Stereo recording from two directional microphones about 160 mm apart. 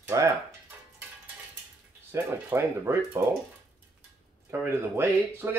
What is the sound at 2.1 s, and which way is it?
Speech, 15° right (ahead or behind).